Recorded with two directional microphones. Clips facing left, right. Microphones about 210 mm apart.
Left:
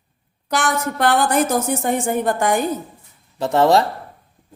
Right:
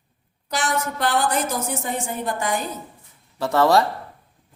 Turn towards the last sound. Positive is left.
turn(degrees=20)  # may be behind; listen again after turning